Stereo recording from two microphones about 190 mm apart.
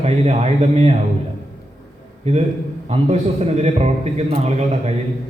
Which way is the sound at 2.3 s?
35° right (ahead or behind).